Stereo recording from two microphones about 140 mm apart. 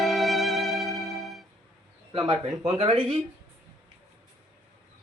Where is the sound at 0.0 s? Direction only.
Centre (ahead or behind).